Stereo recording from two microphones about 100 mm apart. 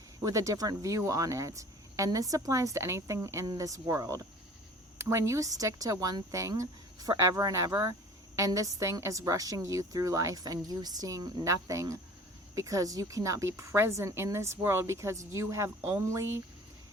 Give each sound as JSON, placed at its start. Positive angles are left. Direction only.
{"t": 0.2, "sound": "a woman's voice", "side_deg": -35}